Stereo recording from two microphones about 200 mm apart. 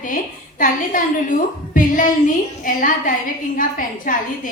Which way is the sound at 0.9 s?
45° left (ahead or behind).